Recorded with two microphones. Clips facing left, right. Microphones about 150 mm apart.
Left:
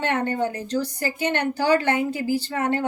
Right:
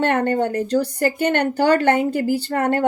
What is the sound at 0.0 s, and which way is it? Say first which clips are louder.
Speech: right 5 dB; 55° right (ahead or behind).